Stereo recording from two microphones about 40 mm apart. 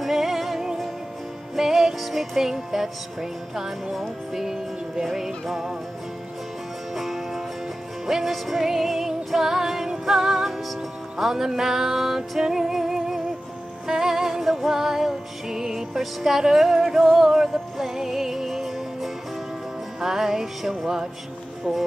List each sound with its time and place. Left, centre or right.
0.0 s music: centre
7.0 s music: centre